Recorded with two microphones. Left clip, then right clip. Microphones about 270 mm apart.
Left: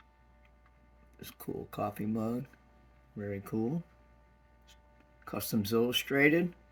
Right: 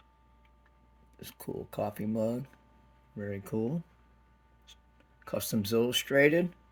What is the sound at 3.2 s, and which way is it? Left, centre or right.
Speech, right.